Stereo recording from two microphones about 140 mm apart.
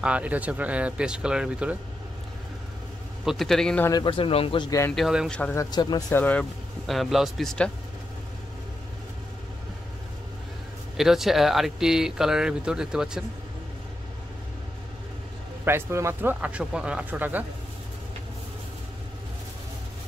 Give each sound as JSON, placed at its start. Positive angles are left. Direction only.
{"t": 0.0, "sound": "speech", "side_deg": -10}
{"t": 3.3, "sound": "speech", "side_deg": 0}
{"t": 3.9, "sound": "speech", "side_deg": 35}
{"t": 4.6, "sound": "speech", "side_deg": 20}
{"t": 4.9, "sound": "speech", "side_deg": 0}
{"t": 5.3, "sound": "speech", "side_deg": 10}
{"t": 5.6, "sound": "speech", "side_deg": 30}
{"t": 6.1, "sound": "speech", "side_deg": 10}
{"t": 6.9, "sound": "speech", "side_deg": 0}
{"t": 11.0, "sound": "speech", "side_deg": 0}
{"t": 15.6, "sound": "speech", "side_deg": -20}